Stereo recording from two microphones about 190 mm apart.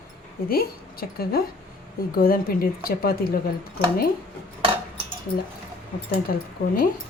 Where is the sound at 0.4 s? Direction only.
50° left (ahead or behind).